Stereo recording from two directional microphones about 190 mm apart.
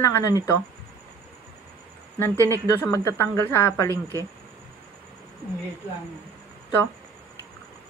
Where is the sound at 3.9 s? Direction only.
15° right (ahead or behind).